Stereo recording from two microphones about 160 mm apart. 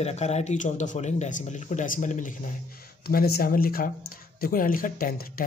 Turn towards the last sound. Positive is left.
turn(degrees=65)  # may be behind; listen again after turning